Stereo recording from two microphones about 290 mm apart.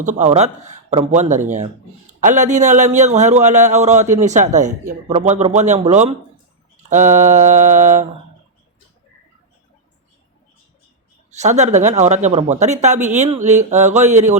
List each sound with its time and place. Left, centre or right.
0.0 s speech: right
11.3 s speech: right